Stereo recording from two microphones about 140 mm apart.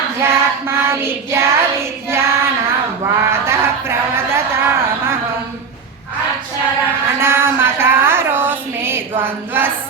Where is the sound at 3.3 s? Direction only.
20° right (ahead or behind).